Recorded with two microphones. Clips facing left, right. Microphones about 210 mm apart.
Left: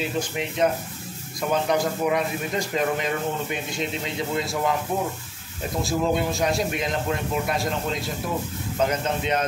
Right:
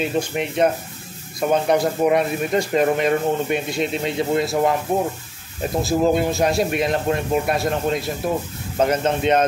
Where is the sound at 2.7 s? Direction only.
60° right (ahead or behind).